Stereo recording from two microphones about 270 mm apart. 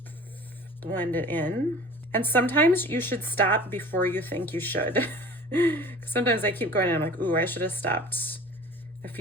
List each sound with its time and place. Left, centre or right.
0.8 s speech: centre